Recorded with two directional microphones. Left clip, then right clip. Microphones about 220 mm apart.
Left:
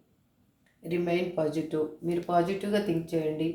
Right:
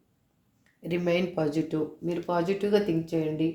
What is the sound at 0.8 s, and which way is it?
Speech, 45° right (ahead or behind).